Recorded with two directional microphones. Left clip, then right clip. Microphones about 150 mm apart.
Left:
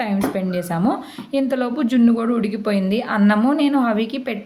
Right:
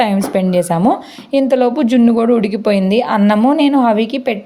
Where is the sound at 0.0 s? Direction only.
50° right (ahead or behind).